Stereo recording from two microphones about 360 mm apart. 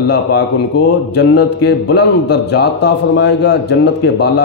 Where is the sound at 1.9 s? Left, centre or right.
Left.